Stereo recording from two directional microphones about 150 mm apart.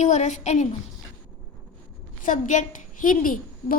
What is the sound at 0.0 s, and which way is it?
Speech, 55° left (ahead or behind).